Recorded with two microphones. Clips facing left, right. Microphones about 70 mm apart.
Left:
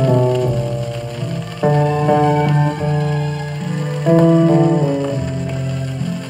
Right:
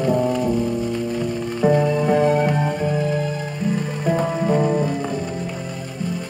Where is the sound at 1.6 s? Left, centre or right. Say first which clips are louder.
Left 1 dB; left.